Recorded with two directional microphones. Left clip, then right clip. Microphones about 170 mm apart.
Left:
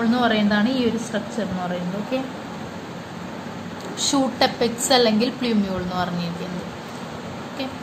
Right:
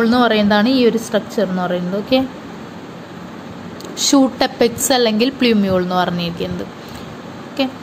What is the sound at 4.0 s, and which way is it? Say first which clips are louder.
A woman's voice: right 5 dB; 40° right (ahead or behind).